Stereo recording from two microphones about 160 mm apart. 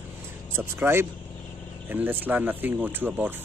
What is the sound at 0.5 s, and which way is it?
Speech, 15° right (ahead or behind).